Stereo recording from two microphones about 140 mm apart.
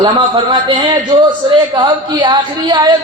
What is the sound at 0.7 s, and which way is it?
A woman's voice, 35° right (ahead or behind).